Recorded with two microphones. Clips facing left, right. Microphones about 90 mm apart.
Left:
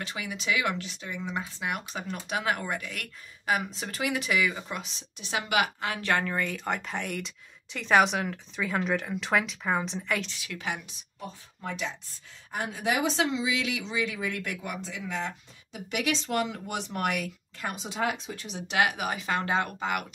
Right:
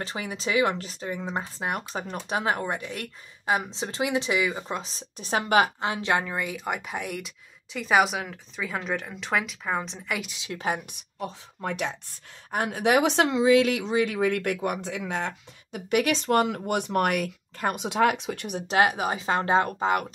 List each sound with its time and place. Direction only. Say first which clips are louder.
0.0 s speech: right 3 dB; 35° right (ahead or behind); by 10.3 s 5° right (ahead or behind)
10.3 s a woman's voice: right 3 dB; 25° right (ahead or behind)
10.9 s speech: right 6 dB; 70° right (ahead or behind)
18.7 s speech: right 4 dB; 30° right (ahead or behind)